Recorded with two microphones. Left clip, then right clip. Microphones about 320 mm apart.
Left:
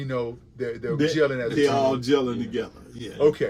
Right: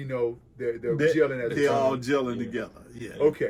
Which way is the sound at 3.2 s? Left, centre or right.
Centre.